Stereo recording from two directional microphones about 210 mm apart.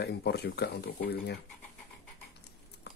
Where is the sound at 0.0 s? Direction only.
50° left (ahead or behind).